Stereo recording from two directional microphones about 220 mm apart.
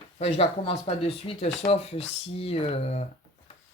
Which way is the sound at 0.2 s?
25° left (ahead or behind).